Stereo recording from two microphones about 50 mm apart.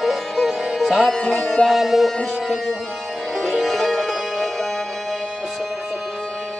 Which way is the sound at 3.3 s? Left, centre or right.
Centre.